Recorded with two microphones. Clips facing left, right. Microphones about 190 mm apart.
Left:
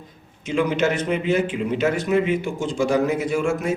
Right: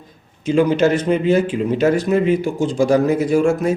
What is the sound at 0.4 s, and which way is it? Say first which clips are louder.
A man's voice: right 6 dB; 35° right (ahead or behind).